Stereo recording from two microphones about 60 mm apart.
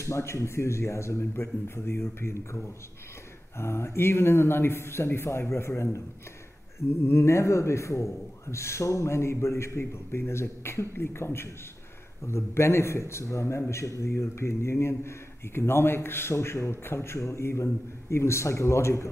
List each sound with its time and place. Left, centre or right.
0.0 s a man's voice: left
6.9 s a man's voice: left